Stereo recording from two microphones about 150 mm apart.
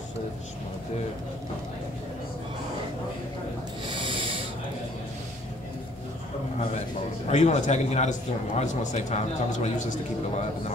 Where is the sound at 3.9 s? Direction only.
35° right (ahead or behind).